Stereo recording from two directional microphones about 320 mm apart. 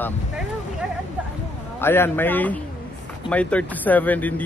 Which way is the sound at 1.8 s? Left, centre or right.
Centre.